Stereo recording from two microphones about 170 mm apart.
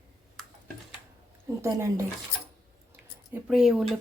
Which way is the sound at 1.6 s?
15° right (ahead or behind).